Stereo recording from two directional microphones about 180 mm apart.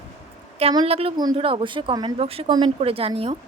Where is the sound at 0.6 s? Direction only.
30° right (ahead or behind).